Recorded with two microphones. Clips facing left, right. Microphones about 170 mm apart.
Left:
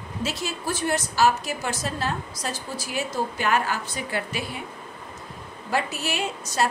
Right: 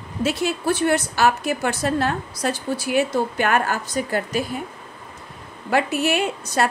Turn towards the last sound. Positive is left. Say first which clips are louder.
# right 4 dB
turn(degrees=-60)  # may be behind; listen again after turning